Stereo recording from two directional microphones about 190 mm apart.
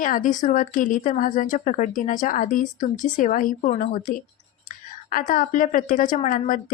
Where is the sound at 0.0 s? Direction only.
45° left (ahead or behind).